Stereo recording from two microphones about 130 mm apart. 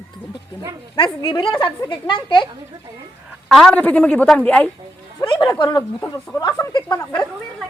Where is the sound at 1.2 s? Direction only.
40° left (ahead or behind).